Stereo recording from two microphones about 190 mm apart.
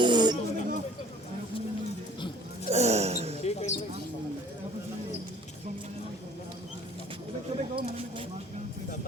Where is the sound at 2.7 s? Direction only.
35° right (ahead or behind).